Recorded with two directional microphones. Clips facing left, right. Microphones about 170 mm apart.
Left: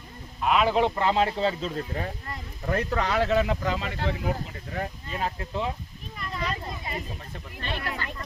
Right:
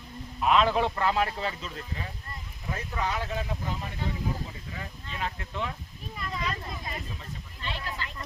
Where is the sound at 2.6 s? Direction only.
70° left (ahead or behind).